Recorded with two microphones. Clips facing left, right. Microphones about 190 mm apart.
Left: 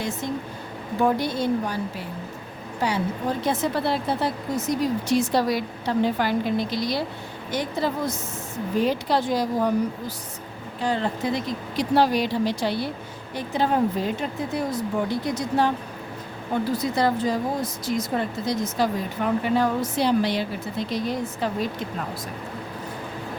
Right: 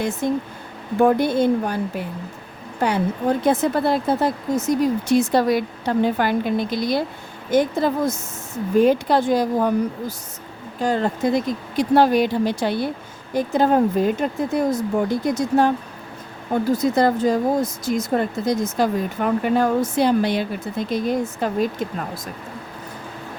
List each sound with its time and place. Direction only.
0.2 s a woman's voice: 50° right (ahead or behind)
10.8 s speech: 45° right (ahead or behind)
16.7 s speech: 45° right (ahead or behind)